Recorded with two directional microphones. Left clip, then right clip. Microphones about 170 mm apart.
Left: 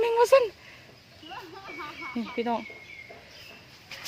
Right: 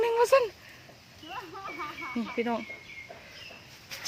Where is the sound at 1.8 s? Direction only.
5° left (ahead or behind).